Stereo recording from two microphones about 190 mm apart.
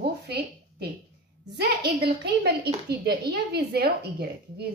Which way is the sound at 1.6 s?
60° right (ahead or behind).